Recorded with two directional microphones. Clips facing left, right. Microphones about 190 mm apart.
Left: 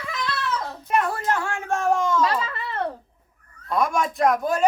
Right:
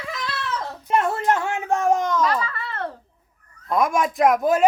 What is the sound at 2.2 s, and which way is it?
Speech, 25° left (ahead or behind).